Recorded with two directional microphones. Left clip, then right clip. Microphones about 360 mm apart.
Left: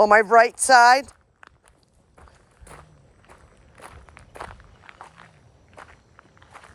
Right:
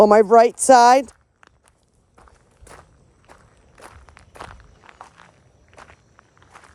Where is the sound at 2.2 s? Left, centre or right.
Centre.